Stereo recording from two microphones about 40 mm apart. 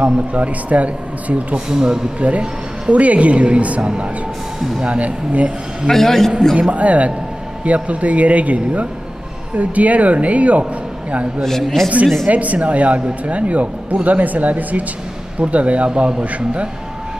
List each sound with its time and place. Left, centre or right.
0.0 s speech: right
1.7 s speech: centre
2.1 s speech: right
5.9 s a man's voice: centre
6.7 s speech: right
11.4 s a man's voice: centre
12.3 s speech: right